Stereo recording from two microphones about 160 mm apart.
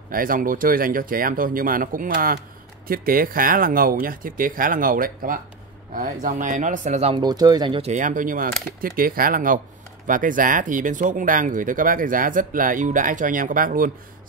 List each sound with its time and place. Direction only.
0.1 s speech: 60° right (ahead or behind); by 7.2 s 45° right (ahead or behind)
7.2 s speech: 25° right (ahead or behind)
7.8 s speech: 50° right (ahead or behind)